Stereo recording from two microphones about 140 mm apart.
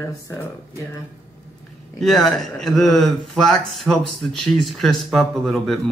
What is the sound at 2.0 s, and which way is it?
Speech, centre (ahead or behind).